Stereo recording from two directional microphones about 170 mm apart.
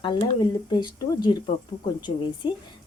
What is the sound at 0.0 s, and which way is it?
Speech, 25° left (ahead or behind).